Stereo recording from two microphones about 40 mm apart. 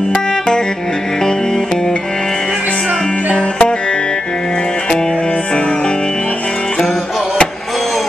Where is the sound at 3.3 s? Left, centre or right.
Left.